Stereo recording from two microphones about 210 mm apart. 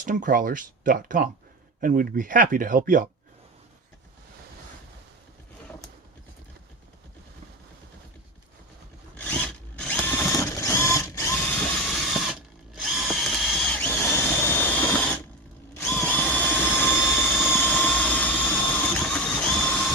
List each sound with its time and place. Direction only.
0.0 s speech: 40° right (ahead or behind)
9.1 s drill: 5° left (ahead or behind)
15.7 s drill: 5° left (ahead or behind)
18.9 s a sound: 5° left (ahead or behind)